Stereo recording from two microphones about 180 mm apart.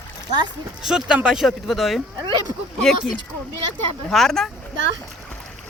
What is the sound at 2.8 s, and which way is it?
Speech, centre (ahead or behind).